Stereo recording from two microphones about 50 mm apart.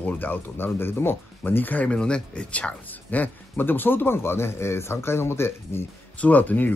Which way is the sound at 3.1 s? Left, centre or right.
Left.